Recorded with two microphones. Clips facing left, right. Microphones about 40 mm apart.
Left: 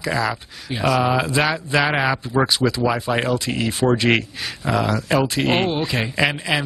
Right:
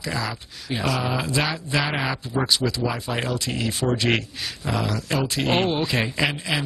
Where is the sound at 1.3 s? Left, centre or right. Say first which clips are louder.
Left 5 dB; centre.